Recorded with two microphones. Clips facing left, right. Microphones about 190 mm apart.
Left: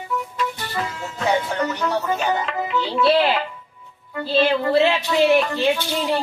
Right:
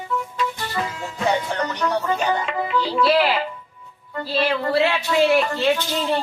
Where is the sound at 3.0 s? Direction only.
25° left (ahead or behind).